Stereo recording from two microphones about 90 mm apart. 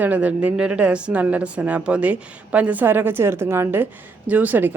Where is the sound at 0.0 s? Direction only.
15° right (ahead or behind).